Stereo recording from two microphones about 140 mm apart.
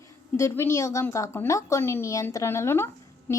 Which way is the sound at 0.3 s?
20° left (ahead or behind).